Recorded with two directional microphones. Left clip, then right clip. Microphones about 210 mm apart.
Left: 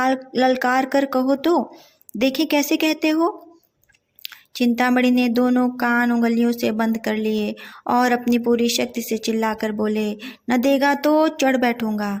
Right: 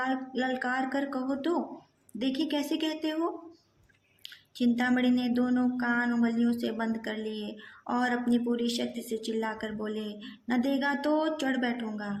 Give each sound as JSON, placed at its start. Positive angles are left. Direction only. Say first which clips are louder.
{"t": 0.0, "sound": "speech", "louder": "left 12 dB", "side_deg": 35}